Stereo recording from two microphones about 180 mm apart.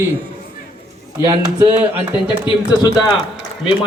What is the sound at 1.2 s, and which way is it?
Speech, 15° right (ahead or behind).